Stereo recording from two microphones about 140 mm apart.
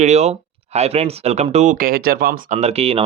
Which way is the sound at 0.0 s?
55° right (ahead or behind).